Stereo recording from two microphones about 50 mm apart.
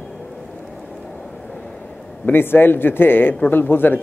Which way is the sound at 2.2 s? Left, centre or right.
Left.